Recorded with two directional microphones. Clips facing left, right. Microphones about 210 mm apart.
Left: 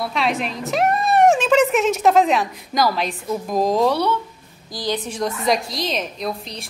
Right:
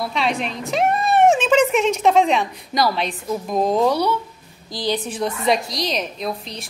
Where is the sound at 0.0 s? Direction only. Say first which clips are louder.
Even; centre (ahead or behind).